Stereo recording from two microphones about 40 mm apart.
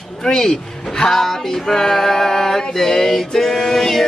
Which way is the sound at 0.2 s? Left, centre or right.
Centre.